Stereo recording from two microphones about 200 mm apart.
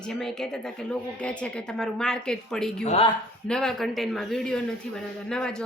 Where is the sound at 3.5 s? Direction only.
Centre (ahead or behind).